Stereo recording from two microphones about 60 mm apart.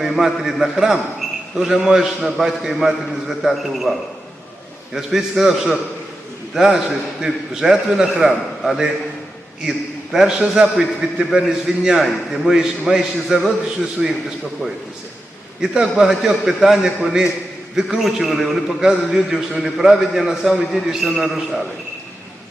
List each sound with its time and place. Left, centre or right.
0.0 s a man's voice: centre
4.9 s a man's voice: centre
15.6 s a man's voice: centre